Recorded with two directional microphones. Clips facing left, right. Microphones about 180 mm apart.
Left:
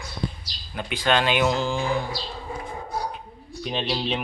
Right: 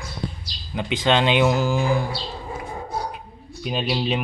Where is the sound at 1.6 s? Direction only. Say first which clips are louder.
Right 4 dB; 10° right (ahead or behind).